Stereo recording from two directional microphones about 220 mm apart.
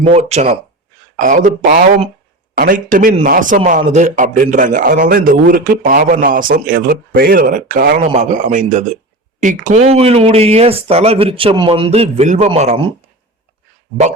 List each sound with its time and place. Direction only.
0.0 s a man's voice: 30° right (ahead or behind)